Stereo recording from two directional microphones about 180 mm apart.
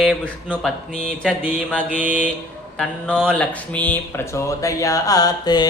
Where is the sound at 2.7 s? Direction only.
5° left (ahead or behind).